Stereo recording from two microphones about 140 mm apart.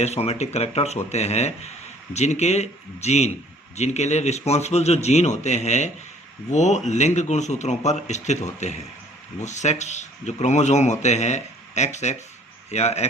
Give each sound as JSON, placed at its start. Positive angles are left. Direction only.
{"t": 0.0, "sound": "a man's voice", "side_deg": 50}